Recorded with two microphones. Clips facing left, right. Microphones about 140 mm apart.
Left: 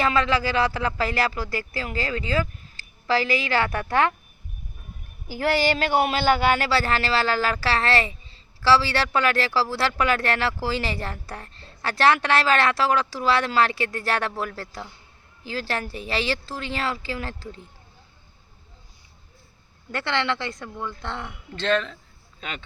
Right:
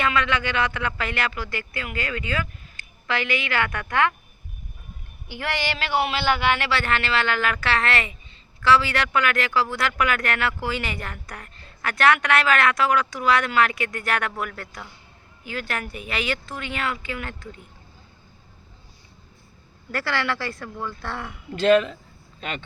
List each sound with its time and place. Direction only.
0.0 s speech: 30° left (ahead or behind)
5.3 s speech: 35° left (ahead or behind)
19.9 s a woman's voice: 20° left (ahead or behind)
21.5 s speech: 10° right (ahead or behind)